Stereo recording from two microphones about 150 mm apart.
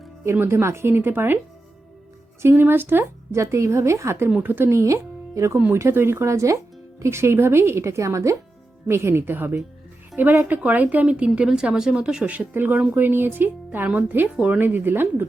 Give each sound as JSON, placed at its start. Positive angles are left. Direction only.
{"t": 0.3, "sound": "a woman's voice", "side_deg": -15}
{"t": 2.4, "sound": "a woman's voice", "side_deg": -15}